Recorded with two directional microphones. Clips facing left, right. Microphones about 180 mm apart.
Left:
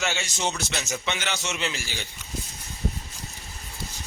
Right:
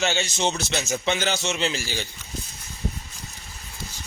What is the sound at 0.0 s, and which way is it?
Speech, 25° right (ahead or behind).